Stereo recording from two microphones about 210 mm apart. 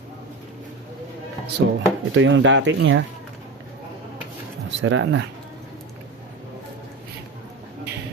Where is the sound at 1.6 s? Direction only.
55° right (ahead or behind).